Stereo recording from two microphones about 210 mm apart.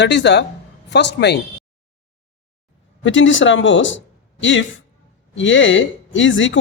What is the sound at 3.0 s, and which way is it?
Speech, 65° left (ahead or behind).